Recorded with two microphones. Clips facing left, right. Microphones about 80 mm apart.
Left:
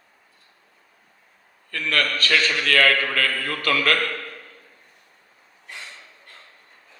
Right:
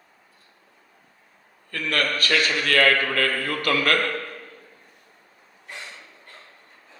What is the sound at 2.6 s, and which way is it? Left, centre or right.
Speech, right.